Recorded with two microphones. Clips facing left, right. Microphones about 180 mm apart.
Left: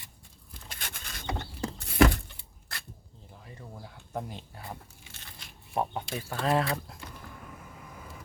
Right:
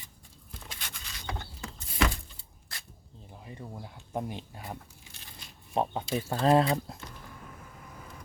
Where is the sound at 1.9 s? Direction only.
50° left (ahead or behind).